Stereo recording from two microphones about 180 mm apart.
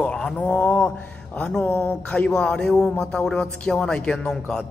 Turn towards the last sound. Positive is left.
turn(degrees=5)  # may be behind; listen again after turning